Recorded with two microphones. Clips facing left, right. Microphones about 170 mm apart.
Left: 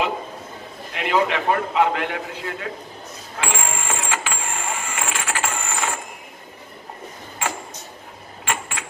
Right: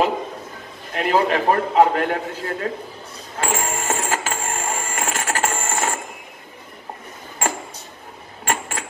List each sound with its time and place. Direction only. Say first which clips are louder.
0.9 s a man's voice: right 2 dB; 40° right (ahead or behind)
3.3 s printer: right 3 dB; 40° right (ahead or behind)
7.4 s a sound: right 3 dB; 45° right (ahead or behind)
8.5 s mechanisms: right 3 dB; 45° right (ahead or behind)